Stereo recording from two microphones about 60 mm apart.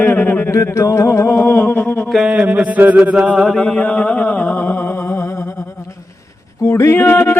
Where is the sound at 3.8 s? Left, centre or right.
Left.